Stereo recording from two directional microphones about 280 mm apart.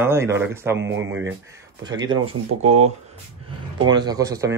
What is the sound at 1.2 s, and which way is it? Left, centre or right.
Speech, centre.